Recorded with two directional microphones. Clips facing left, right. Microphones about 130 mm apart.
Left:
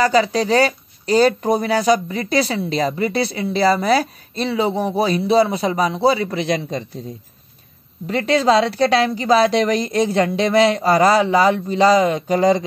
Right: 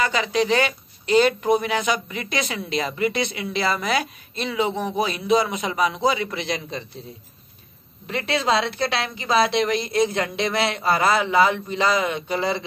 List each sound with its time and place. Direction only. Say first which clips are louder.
0.0 s speech: left 6 dB; 35° left (ahead or behind)
8.1 s speech: left 7 dB; 35° left (ahead or behind)